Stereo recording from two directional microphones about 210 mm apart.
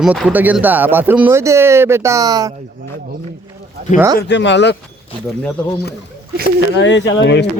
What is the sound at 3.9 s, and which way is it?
Speech, 15° right (ahead or behind).